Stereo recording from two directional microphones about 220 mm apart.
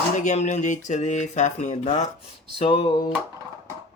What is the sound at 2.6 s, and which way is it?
Music, 25° left (ahead or behind).